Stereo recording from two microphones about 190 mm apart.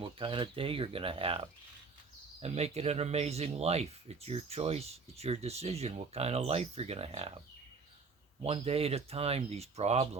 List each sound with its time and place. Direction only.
0.0 s speech: 25° right (ahead or behind)
8.4 s speech: 30° right (ahead or behind)